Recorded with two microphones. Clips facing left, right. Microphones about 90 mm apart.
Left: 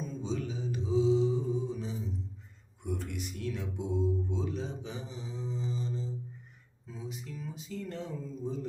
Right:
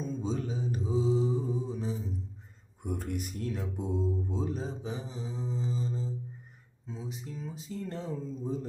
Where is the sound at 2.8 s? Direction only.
45° right (ahead or behind).